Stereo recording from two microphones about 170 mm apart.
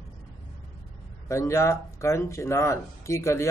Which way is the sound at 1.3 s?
15° left (ahead or behind).